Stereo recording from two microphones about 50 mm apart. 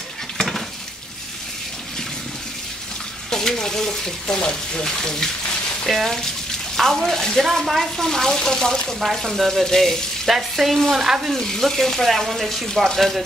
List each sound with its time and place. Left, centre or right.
0.4 s dishes: centre
3.3 s speech: centre
7.4 s speech: centre
11.3 s speech: centre